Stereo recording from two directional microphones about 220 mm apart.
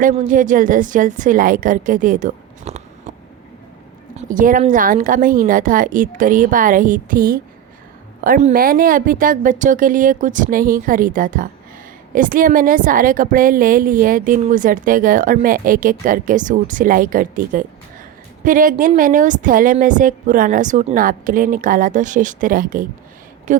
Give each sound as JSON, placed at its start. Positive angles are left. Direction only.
{"t": 0.0, "sound": "a woman's voice", "side_deg": -35}
{"t": 4.2, "sound": "a woman's voice", "side_deg": -35}